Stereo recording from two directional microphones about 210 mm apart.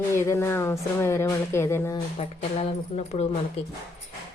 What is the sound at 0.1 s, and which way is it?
Speech, 10° left (ahead or behind).